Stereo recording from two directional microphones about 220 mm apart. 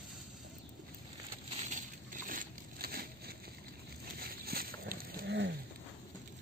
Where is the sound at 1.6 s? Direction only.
35° right (ahead or behind).